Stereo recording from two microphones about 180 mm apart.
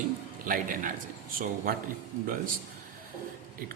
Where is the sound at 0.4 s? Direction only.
50° right (ahead or behind).